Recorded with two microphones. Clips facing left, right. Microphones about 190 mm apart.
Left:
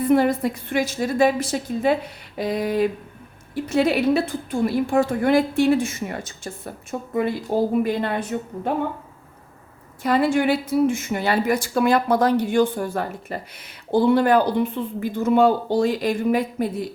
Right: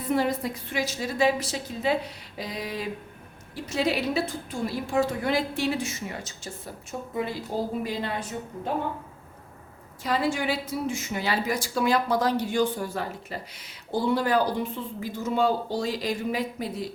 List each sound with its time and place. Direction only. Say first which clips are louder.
0.0 s a woman's voice: left 8 dB; 55° left (ahead or behind)
10.0 s a woman's voice: left 7 dB; 55° left (ahead or behind)